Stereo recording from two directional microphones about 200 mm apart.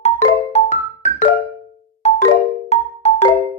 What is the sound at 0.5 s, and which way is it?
Music, 35° left (ahead or behind).